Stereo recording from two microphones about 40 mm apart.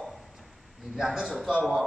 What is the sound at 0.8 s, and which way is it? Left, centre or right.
Speech, centre.